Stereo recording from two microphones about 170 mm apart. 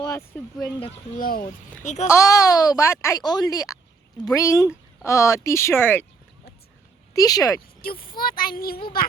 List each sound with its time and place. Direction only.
0.0 s a sound: 20° left (ahead or behind)
1.2 s speech: 55° left (ahead or behind)
2.0 s speech: 20° left (ahead or behind)
7.1 s speech: 20° left (ahead or behind)
7.8 s speech: 60° left (ahead or behind)